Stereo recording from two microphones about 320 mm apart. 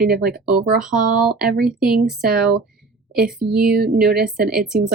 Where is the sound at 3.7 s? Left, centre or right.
Right.